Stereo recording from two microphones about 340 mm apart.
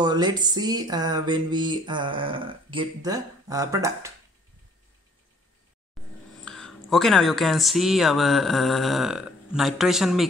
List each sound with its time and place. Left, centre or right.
0.0 s speech: centre
6.0 s a sound: centre
6.4 s speech: centre